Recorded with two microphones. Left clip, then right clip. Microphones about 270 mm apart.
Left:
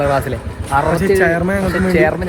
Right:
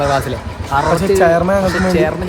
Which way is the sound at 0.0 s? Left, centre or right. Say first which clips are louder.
Even; centre.